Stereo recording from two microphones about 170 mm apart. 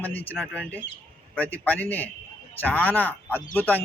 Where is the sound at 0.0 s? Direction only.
10° left (ahead or behind).